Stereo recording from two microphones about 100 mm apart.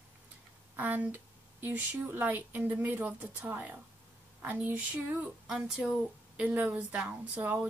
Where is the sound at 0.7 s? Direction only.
15° right (ahead or behind).